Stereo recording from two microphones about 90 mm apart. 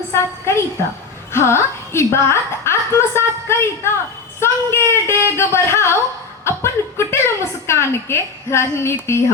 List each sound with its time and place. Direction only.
0.1 s a woman's voice: 30° left (ahead or behind)